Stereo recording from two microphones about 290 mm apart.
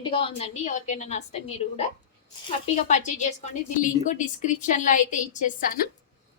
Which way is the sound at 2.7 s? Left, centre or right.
Left.